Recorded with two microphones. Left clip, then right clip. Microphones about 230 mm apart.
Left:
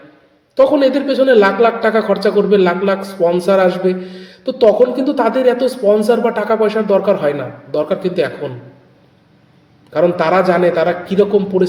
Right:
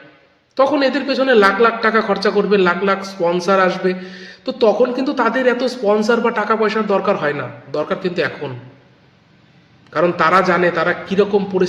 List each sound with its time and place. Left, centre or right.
0.5 s a man's voice: centre
9.9 s a man's voice: centre